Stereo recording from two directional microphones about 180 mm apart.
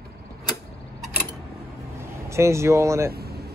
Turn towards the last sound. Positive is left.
turn(degrees=-60)  # may be behind; listen again after turning